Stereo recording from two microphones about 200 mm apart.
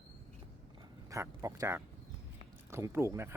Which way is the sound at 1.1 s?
15° right (ahead or behind).